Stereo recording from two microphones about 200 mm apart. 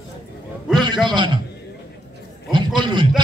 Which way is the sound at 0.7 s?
20° right (ahead or behind).